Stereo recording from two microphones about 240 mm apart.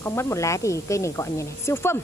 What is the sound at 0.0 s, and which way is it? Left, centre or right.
Speech, centre.